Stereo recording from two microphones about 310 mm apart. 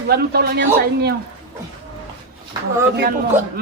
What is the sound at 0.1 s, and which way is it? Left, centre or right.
Speech, right.